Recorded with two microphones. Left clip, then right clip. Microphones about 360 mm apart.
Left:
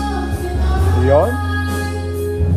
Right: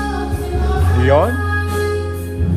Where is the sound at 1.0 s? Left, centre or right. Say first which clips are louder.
Even; right.